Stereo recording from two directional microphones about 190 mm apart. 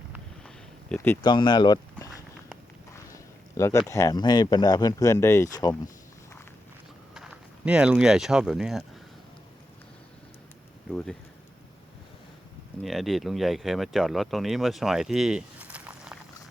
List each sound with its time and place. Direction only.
0.9 s speech: 15° left (ahead or behind)
3.5 s speech: 15° left (ahead or behind)
7.1 s speech: 5° right (ahead or behind)
12.8 s speech: centre (ahead or behind)